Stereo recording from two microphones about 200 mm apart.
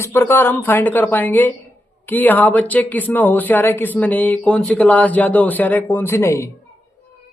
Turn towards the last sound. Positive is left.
turn(degrees=15)  # may be behind; listen again after turning